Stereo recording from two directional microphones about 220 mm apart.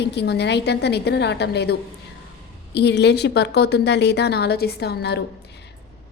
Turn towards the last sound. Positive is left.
turn(degrees=50)  # may be behind; listen again after turning